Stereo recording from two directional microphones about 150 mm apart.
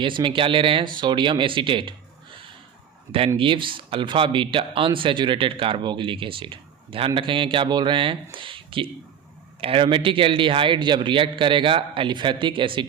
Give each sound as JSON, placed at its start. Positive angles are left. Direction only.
{"t": 0.0, "sound": "speech", "side_deg": -35}
{"t": 3.3, "sound": "speech", "side_deg": -35}